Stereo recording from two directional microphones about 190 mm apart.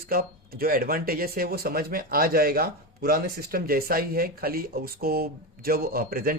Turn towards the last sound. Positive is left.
turn(degrees=-50)  # may be behind; listen again after turning